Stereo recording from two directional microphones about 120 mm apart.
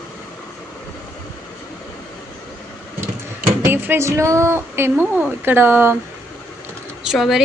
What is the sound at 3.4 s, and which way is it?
Speech, 15° right (ahead or behind).